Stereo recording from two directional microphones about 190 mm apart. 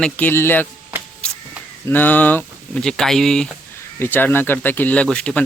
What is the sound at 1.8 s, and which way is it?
Speech, 10° left (ahead or behind).